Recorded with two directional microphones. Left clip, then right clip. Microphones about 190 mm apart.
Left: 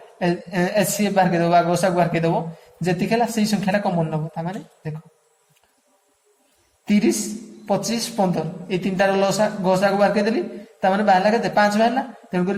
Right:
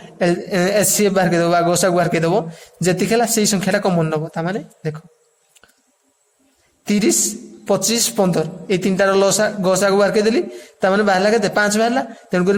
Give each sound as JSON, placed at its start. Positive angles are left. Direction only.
{"t": 0.2, "sound": "a man's voice", "side_deg": -50}
{"t": 6.8, "sound": "a woman's voice", "side_deg": -50}